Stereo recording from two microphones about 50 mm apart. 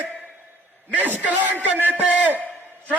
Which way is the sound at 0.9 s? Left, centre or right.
Right.